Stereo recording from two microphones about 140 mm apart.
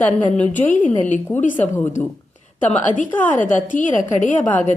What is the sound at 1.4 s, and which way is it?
Speech, 65° left (ahead or behind).